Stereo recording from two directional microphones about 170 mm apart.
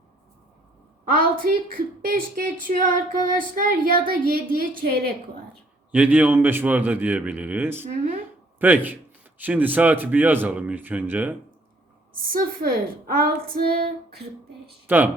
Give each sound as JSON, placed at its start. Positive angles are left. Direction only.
{"t": 1.1, "sound": "speech", "side_deg": -55}
{"t": 5.9, "sound": "a man's voice", "side_deg": -10}
{"t": 12.3, "sound": "speech", "side_deg": -55}
{"t": 14.8, "sound": "a man's voice", "side_deg": -10}